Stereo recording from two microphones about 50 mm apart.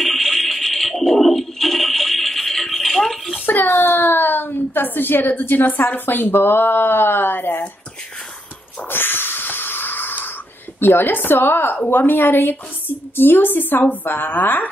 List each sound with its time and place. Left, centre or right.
0.0 s a sound: centre
3.4 s a woman's voice: left
8.8 s wheeze: left
10.8 s a woman's voice: left